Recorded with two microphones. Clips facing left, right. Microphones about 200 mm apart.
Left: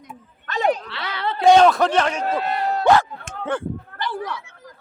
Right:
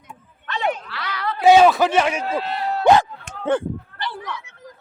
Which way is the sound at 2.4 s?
45° left (ahead or behind).